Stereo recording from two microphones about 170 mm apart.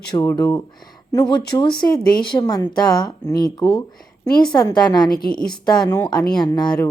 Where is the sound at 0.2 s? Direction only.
20° left (ahead or behind).